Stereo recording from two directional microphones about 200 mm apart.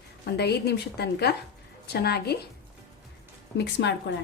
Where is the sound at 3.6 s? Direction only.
60° left (ahead or behind).